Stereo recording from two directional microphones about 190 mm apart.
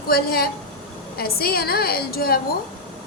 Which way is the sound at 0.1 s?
55° left (ahead or behind).